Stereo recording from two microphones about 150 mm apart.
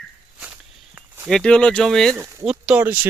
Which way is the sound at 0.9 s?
15° right (ahead or behind).